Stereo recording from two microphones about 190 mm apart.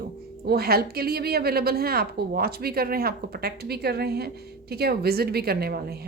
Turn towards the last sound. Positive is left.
turn(degrees=-55)  # may be behind; listen again after turning